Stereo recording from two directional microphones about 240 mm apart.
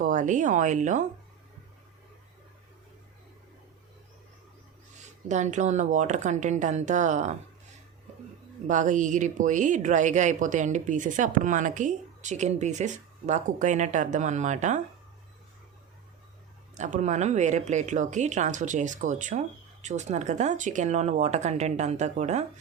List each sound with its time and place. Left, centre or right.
0.0 s speech: right
5.3 s speech: right
8.6 s speech: right
16.7 s speech: right